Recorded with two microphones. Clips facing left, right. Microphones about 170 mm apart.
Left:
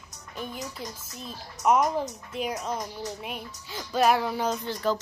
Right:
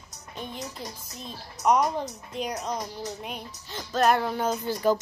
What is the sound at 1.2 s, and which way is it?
Music, 5° left (ahead or behind).